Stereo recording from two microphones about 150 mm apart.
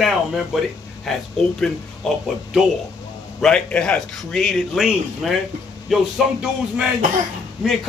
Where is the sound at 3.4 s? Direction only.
5° left (ahead or behind).